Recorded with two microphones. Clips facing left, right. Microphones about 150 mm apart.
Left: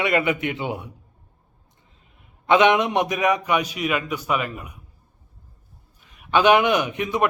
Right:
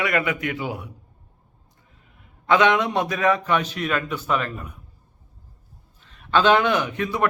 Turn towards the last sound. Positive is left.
turn(degrees=20)  # may be behind; listen again after turning